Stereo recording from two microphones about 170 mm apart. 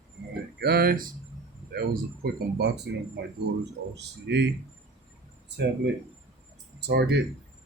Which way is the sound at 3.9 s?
90° right.